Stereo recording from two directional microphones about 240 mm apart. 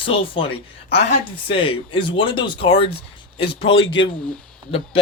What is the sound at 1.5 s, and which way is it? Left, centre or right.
Speech, left.